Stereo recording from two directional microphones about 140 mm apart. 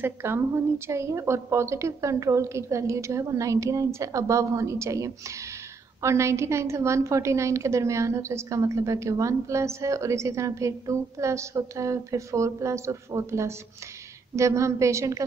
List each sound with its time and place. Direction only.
0.0 s a woman's voice: 15° right (ahead or behind)